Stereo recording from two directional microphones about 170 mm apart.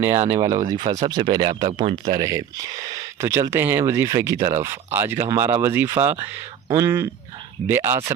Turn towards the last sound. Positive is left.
turn(degrees=-15)  # may be behind; listen again after turning